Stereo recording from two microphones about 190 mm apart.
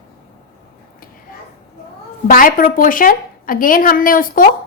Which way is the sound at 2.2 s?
45° left (ahead or behind).